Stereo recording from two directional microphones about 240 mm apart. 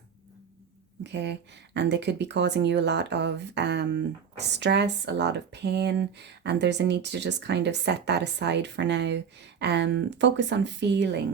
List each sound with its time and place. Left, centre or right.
1.0 s speech: right